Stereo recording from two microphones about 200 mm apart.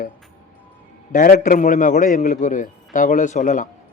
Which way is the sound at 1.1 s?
45° left (ahead or behind).